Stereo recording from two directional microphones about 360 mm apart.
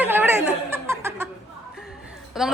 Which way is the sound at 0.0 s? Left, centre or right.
Centre.